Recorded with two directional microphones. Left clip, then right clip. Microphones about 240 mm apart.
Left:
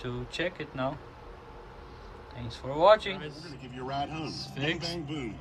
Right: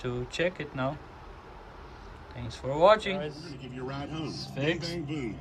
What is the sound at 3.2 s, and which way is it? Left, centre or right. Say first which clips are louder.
A man's voice: right 4 dB; centre.